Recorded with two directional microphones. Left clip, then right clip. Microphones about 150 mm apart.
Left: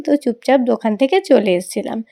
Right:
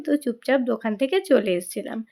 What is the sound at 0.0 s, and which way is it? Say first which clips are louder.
Speech: left 7 dB; 30° left (ahead or behind).